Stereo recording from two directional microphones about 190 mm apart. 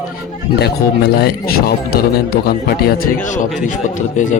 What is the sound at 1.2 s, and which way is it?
A man's voice, 55° left (ahead or behind).